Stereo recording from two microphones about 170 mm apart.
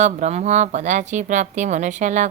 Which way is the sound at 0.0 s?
40° right (ahead or behind).